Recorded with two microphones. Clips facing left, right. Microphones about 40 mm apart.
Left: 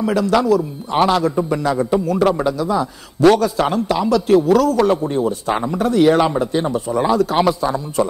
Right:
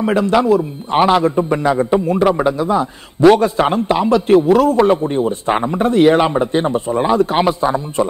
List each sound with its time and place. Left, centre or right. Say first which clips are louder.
0.0 s a man's voice: right 2 dB; right